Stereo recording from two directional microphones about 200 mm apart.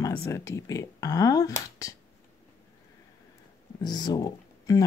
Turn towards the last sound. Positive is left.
turn(degrees=20)  # may be behind; listen again after turning